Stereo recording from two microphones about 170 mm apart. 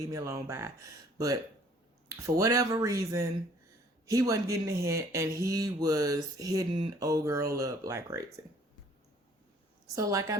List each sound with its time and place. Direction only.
0.1 s speech: 20° right (ahead or behind)
9.9 s speech: 20° right (ahead or behind)